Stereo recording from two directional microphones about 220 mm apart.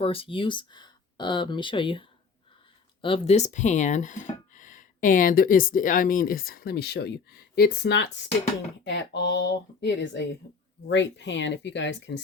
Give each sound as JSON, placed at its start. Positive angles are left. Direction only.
{"t": 0.0, "sound": "speech", "side_deg": 25}
{"t": 8.8, "sound": "a sound", "side_deg": 55}
{"t": 10.8, "sound": "speech", "side_deg": 55}